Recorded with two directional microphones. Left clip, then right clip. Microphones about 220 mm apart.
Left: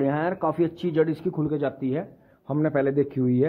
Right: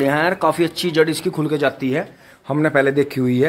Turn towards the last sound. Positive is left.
turn(degrees=-5)  # may be behind; listen again after turning